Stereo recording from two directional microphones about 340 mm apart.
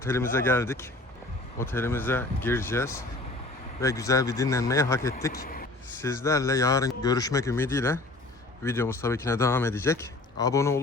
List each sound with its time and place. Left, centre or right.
0.0 s speech: centre
5.3 s vehicle: left
6.0 s speech: centre